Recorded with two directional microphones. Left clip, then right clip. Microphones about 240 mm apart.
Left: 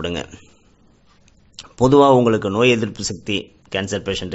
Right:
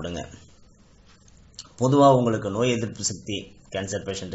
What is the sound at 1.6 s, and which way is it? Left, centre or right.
Speech, left.